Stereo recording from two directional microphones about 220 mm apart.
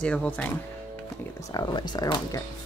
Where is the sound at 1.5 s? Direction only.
20° left (ahead or behind).